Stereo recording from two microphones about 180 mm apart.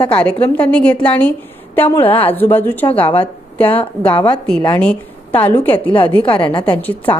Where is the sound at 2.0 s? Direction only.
30° left (ahead or behind).